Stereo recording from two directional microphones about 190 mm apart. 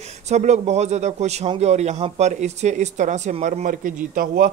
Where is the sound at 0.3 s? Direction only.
35° right (ahead or behind).